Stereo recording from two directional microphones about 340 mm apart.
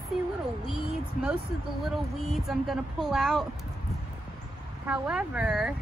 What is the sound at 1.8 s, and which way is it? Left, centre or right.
Speech, centre.